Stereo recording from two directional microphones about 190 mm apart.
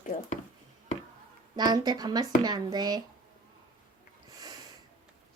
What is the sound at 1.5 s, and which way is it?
A woman's voice, 20° right (ahead or behind).